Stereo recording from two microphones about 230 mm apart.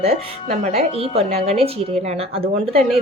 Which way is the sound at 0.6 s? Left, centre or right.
Right.